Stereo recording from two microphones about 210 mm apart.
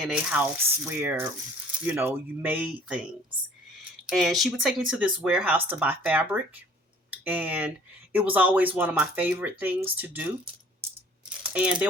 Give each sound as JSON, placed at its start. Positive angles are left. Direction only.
{"t": 0.0, "sound": "speech", "side_deg": -5}
{"t": 4.0, "sound": "speech", "side_deg": 0}
{"t": 11.5, "sound": "speech", "side_deg": -5}